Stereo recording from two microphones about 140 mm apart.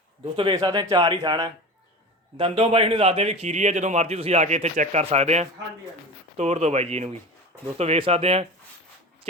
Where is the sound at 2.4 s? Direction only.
45° right (ahead or behind).